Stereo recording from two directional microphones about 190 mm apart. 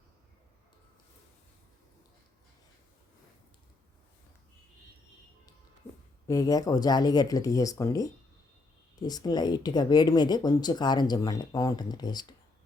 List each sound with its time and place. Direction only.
6.2 s speech: 20° left (ahead or behind)